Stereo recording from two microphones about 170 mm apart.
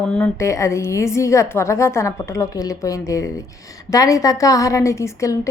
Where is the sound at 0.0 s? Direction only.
5° left (ahead or behind).